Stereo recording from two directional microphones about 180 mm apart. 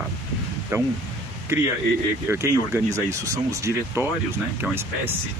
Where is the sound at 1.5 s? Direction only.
15° right (ahead or behind).